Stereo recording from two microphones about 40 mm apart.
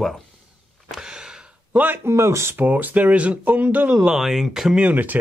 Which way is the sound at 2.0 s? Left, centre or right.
Right.